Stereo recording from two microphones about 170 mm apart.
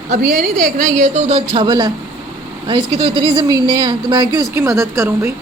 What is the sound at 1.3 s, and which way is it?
Speech, 35° right (ahead or behind).